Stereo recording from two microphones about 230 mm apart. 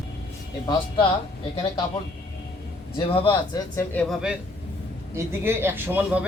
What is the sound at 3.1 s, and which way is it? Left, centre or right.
Speech, centre.